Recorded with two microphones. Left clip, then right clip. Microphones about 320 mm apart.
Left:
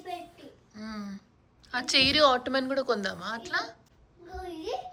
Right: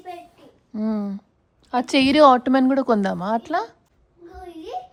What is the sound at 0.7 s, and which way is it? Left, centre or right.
A woman's voice, centre.